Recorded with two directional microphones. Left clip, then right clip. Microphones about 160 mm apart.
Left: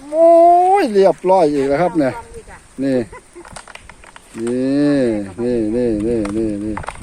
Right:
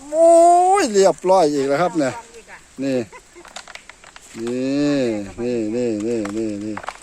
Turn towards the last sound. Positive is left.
turn(degrees=-15)  # may be behind; listen again after turning